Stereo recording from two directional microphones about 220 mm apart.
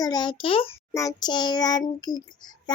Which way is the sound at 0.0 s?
20° left (ahead or behind).